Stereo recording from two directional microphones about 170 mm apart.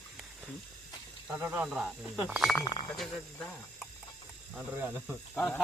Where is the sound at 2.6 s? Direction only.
25° left (ahead or behind).